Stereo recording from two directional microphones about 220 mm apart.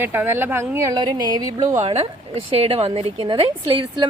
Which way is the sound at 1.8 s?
30° right (ahead or behind).